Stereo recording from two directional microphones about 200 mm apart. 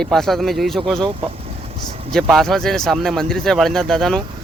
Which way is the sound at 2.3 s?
Centre (ahead or behind).